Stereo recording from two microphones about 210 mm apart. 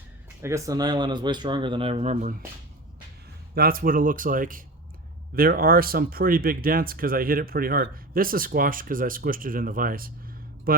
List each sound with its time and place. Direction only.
0.4 s speech: 15° right (ahead or behind); by 2.3 s 30° right (ahead or behind)
3.5 s speech: 45° right (ahead or behind)